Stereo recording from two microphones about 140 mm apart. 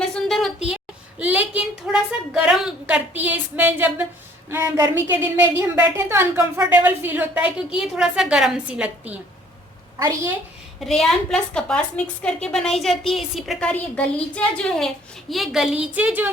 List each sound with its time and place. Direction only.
0.1 s a sound: centre (ahead or behind); by 4.0 s 15° right (ahead or behind)
4.4 s a woman's voice: 20° right (ahead or behind)
10.0 s a woman's voice: 25° right (ahead or behind)
10.8 s a woman's voice: centre (ahead or behind)